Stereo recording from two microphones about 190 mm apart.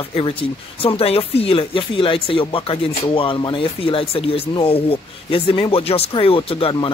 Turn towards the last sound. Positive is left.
turn(degrees=25)  # may be behind; listen again after turning